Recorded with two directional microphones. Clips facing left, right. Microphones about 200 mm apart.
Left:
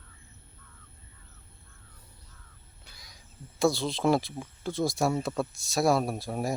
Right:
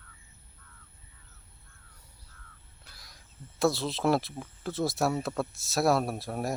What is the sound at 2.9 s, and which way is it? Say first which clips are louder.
Speech: left 1 dB; centre (ahead or behind).